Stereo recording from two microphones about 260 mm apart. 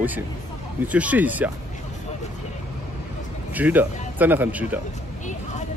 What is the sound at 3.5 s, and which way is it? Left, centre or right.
Speech, centre.